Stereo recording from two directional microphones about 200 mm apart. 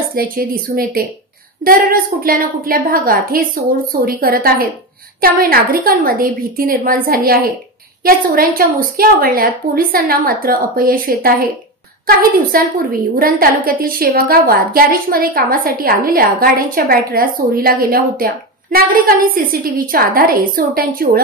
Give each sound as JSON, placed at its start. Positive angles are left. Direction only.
{"t": 0.1, "sound": "a woman's voice", "side_deg": -45}